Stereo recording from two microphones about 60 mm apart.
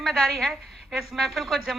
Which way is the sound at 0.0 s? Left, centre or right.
Centre.